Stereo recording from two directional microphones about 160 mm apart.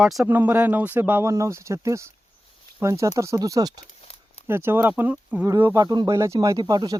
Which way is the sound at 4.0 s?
40° left (ahead or behind).